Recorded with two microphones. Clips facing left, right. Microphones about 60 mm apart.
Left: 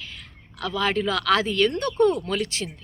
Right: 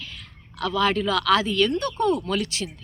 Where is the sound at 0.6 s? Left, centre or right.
Left.